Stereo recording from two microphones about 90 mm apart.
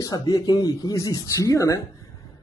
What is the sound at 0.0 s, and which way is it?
Speech, 45° left (ahead or behind).